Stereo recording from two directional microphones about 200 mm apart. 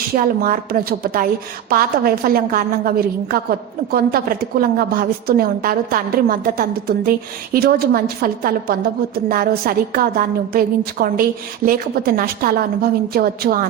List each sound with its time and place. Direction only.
0.2 s a woman's voice: 45° right (ahead or behind)